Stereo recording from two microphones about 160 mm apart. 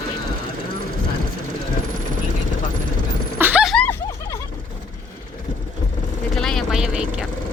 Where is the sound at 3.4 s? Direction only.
10° right (ahead or behind).